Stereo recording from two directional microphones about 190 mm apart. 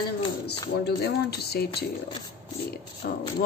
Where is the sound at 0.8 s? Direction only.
60° left (ahead or behind).